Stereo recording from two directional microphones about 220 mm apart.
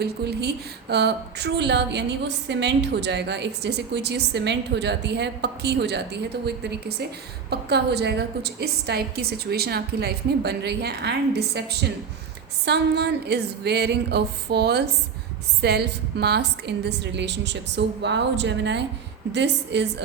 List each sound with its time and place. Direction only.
0.0 s speech: 50° right (ahead or behind)